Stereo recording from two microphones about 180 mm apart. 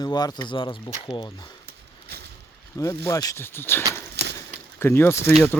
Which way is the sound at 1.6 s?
65° right (ahead or behind).